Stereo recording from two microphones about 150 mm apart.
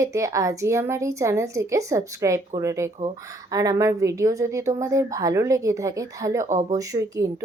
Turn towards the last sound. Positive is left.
turn(degrees=-25)  # may be behind; listen again after turning